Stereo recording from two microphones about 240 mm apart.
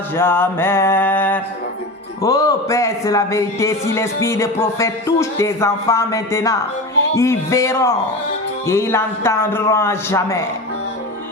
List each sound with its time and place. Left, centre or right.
0.2 s a man's voice: centre